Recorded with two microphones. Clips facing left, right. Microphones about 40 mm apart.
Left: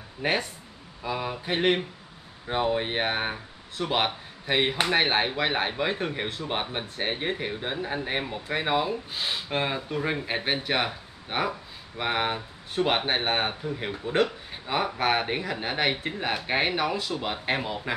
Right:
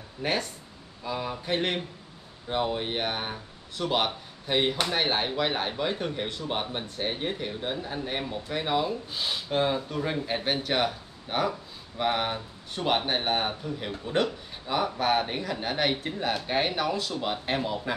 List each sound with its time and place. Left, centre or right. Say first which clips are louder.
0.2 s speech: left 2 dB; centre
14.5 s speech: even; left